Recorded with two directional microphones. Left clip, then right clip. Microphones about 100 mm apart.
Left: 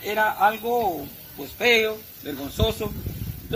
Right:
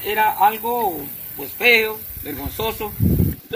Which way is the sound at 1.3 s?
20° left (ahead or behind).